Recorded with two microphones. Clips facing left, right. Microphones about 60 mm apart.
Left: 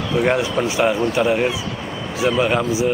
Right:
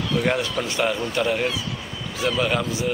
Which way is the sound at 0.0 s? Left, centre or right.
Centre.